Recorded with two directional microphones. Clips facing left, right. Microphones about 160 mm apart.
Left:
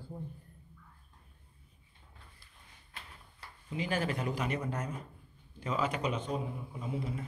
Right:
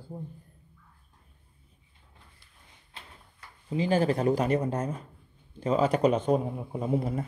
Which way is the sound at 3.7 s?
30° right (ahead or behind).